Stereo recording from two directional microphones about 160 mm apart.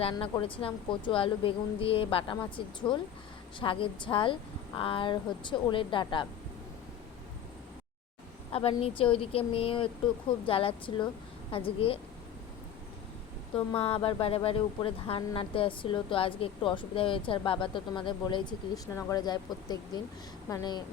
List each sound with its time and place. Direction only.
0.0 s speech: 30° left (ahead or behind)
8.5 s speech: 35° left (ahead or behind)
13.7 s speech: 35° left (ahead or behind)